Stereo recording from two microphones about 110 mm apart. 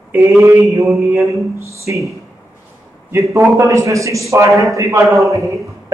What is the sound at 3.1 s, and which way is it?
A man's voice, 25° right (ahead or behind).